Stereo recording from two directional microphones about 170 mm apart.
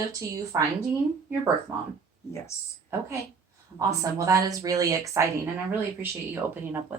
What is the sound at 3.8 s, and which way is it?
Speech, 20° right (ahead or behind).